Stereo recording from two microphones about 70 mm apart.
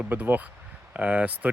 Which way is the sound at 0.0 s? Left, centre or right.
Right.